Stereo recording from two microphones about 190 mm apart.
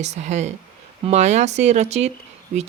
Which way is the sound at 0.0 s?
35° right (ahead or behind).